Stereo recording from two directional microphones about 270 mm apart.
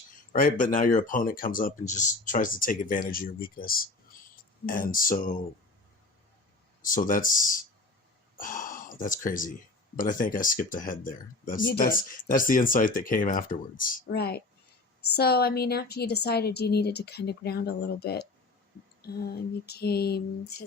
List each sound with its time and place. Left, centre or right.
0.3 s speech: left
6.8 s speech: left